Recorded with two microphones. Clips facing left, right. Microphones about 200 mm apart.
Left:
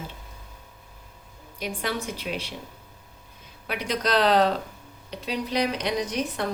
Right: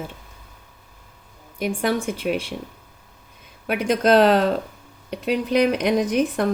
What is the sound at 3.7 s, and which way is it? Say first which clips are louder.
Speech: right 8 dB; 50° right (ahead or behind).